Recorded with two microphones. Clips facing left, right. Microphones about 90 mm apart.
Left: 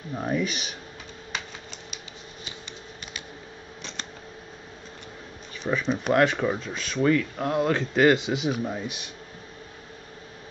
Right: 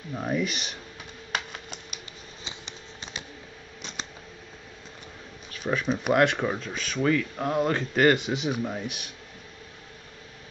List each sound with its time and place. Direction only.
0.1 s speech: centre (ahead or behind)
1.3 s typewriter: 55° right (ahead or behind)
5.6 s speech: 5° right (ahead or behind)